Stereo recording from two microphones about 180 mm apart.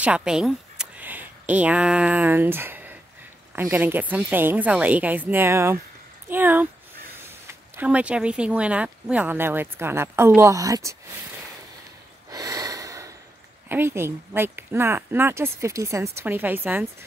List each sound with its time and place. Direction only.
0.0 s speech: 5° right (ahead or behind)
12.3 s snort: 20° right (ahead or behind)
13.7 s speech: 10° right (ahead or behind)